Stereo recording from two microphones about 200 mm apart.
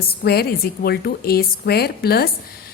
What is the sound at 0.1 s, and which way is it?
A woman's voice, 50° left (ahead or behind).